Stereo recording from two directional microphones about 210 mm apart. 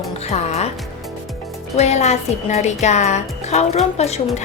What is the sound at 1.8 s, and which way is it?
Speech, 30° left (ahead or behind).